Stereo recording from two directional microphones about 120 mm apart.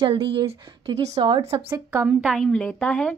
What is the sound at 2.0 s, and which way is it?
A woman's voice, centre (ahead or behind).